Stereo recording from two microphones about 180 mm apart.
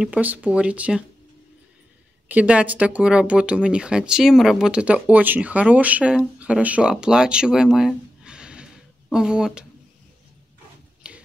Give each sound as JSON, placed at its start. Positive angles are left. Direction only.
{"t": 0.0, "sound": "speech", "side_deg": -10}
{"t": 2.2, "sound": "speech", "side_deg": -10}
{"t": 11.0, "sound": "a sound", "side_deg": -5}